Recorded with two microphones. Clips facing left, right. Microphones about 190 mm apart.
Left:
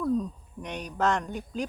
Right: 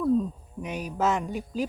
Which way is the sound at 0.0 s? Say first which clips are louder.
Right 3 dB; 5° right (ahead or behind).